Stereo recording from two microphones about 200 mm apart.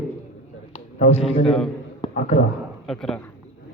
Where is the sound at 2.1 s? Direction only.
35° left (ahead or behind).